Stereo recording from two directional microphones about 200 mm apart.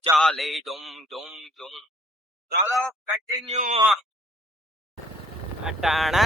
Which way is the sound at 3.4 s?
35° right (ahead or behind).